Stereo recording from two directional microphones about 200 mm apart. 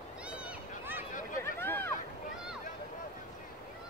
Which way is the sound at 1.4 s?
10° left (ahead or behind).